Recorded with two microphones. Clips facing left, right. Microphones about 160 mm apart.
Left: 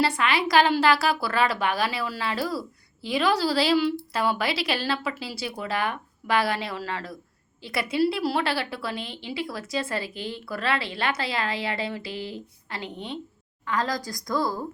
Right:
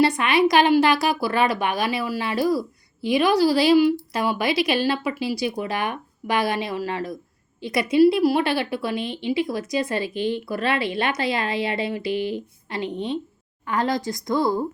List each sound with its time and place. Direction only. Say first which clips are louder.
0.0 s a woman's voice: right 6 dB; 20° right (ahead or behind)